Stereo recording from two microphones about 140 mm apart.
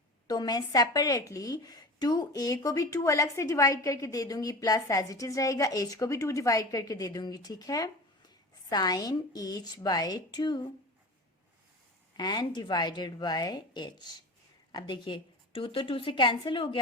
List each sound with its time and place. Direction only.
0.3 s a woman's voice: 30° left (ahead or behind)
12.1 s a woman's voice: 30° left (ahead or behind)